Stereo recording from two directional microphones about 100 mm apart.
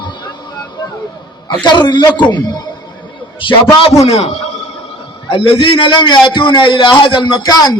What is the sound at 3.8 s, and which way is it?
Speech, 90° left.